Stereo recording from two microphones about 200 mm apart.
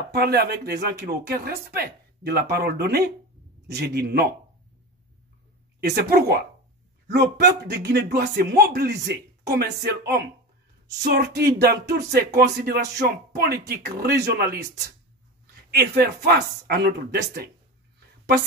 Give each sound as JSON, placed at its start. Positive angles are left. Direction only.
{"t": 0.1, "sound": "speech", "side_deg": -55}
{"t": 5.8, "sound": "speech", "side_deg": -50}
{"t": 15.7, "sound": "speech", "side_deg": -50}